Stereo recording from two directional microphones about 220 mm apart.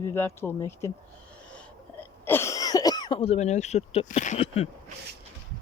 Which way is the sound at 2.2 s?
10° left (ahead or behind).